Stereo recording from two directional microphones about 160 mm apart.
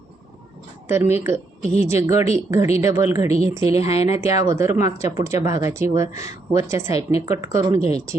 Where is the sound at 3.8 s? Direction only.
40° left (ahead or behind).